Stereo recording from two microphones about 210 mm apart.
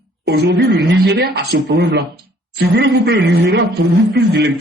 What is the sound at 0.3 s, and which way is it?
A man's voice, 50° right (ahead or behind).